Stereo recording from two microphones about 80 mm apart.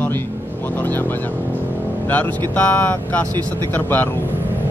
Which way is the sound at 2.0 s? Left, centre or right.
Centre.